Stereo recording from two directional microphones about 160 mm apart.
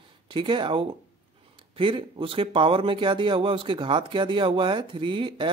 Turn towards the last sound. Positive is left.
turn(degrees=-30)  # may be behind; listen again after turning